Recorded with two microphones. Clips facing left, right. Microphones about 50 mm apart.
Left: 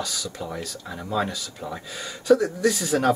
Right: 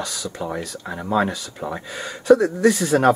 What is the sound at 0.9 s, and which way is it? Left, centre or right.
Speech, centre.